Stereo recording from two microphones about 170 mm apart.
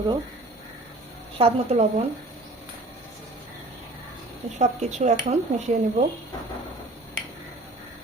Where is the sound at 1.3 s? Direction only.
35° right (ahead or behind).